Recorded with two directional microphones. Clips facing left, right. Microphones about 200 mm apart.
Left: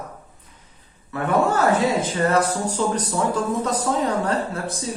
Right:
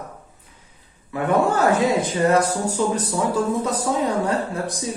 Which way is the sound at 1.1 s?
15° right (ahead or behind).